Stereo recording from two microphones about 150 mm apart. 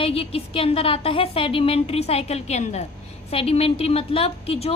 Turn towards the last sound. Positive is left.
turn(degrees=40)  # may be behind; listen again after turning